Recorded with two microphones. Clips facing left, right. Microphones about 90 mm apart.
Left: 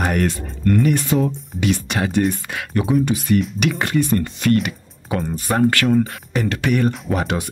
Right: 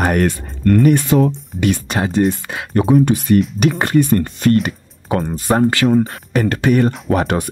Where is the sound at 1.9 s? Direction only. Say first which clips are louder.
Right 2 dB; 30° right (ahead or behind).